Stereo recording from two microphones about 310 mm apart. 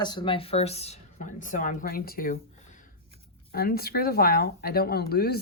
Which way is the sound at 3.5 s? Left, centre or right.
Left.